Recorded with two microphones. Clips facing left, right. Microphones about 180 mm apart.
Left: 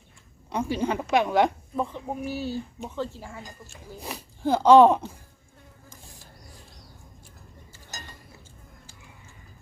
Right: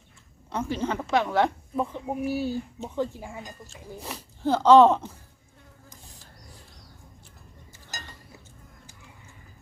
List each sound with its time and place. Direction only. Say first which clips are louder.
0.5 s speech: left 2 dB; 15° left (ahead or behind)
1.7 s speech: right 1 dB; 5° right (ahead or behind)
3.7 s speech: even; 15° left (ahead or behind)